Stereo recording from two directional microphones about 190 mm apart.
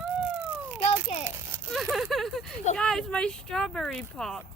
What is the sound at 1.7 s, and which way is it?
Speech, centre (ahead or behind).